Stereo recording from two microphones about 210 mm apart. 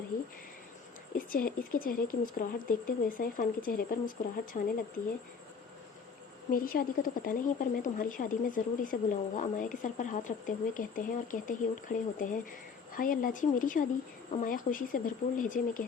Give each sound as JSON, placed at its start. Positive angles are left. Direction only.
{"t": 0.1, "sound": "a woman's voice", "side_deg": 45}
{"t": 6.5, "sound": "a woman's voice", "side_deg": 45}